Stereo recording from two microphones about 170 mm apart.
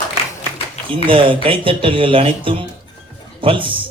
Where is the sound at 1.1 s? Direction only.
30° right (ahead or behind).